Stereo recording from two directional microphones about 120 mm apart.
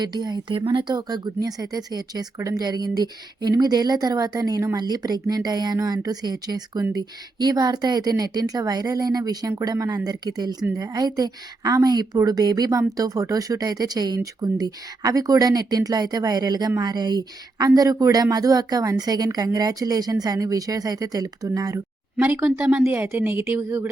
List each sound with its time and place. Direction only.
0.0 s a woman's voice: 35° right (ahead or behind)
22.2 s a woman's voice: 20° right (ahead or behind)